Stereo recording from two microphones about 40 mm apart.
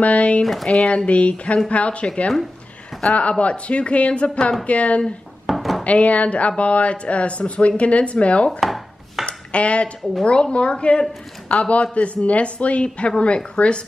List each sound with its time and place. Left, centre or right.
0.0 s speech: left
3.1 s speech: left
5.5 s dishes: centre
5.9 s speech: left
8.5 s chopping: centre
9.2 s dishes: left
10.2 s speech: left